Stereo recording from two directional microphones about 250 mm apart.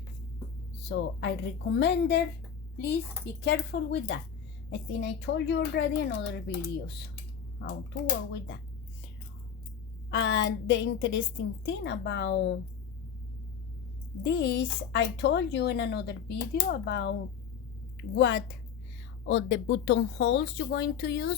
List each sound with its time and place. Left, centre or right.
0.8 s a woman's voice: left
3.4 s a woman's voice: left
10.1 s a woman's voice: left
14.2 s a woman's voice: left